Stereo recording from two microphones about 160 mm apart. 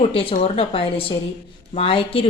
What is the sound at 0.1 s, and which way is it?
Speech, 35° left (ahead or behind).